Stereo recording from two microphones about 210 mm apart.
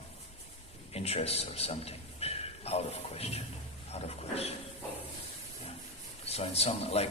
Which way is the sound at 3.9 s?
30° left (ahead or behind).